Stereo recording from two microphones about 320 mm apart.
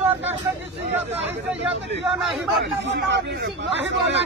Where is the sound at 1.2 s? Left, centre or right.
Right.